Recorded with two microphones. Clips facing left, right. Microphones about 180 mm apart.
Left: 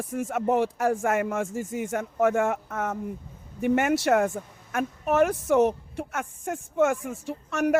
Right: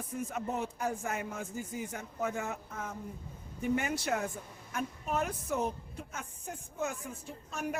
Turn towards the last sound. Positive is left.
turn(degrees=80)